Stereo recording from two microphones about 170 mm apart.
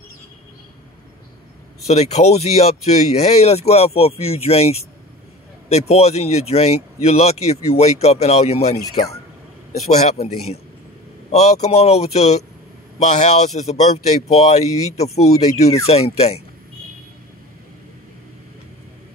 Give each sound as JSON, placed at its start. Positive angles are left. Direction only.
{"t": 1.9, "sound": "a man's voice", "side_deg": 40}